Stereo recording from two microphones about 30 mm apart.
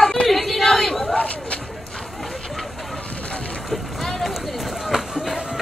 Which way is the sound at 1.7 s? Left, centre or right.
Centre.